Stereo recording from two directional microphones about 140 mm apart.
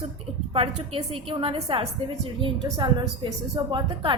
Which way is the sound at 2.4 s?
30° right (ahead or behind).